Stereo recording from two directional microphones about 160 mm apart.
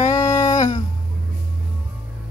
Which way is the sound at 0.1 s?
20° left (ahead or behind).